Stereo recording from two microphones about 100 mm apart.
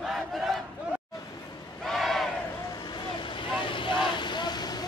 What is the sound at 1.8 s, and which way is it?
Crowd, centre (ahead or behind).